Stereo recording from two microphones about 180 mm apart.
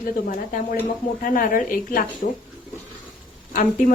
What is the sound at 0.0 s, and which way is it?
Speech, 50° left (ahead or behind).